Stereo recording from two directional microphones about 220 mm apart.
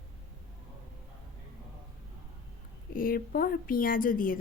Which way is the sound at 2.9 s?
40° left (ahead or behind).